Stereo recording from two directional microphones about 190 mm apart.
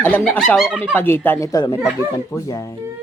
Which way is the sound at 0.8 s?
10° left (ahead or behind).